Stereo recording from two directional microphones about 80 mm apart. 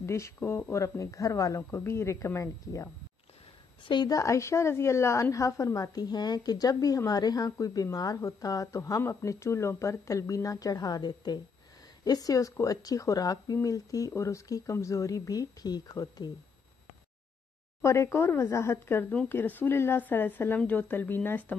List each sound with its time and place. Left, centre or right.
0.0 s speech: left
3.8 s a woman's voice: left
4.1 s speech: left
17.8 s speech: left